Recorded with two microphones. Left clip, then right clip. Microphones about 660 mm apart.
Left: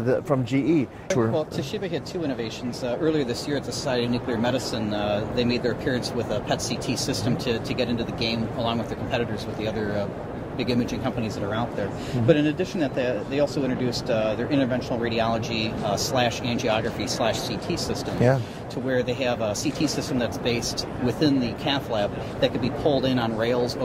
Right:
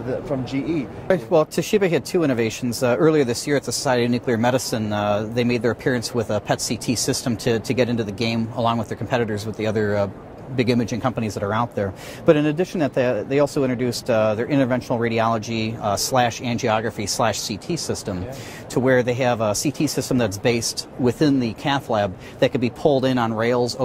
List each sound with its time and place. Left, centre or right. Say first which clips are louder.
0.5 s speech: left 2 dB; left
1.3 s speech: right 9 dB; right